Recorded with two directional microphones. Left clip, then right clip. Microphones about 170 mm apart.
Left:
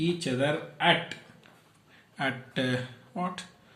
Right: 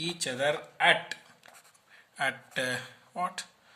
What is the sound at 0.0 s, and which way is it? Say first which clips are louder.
Speech: left 1 dB; 55° right (ahead or behind).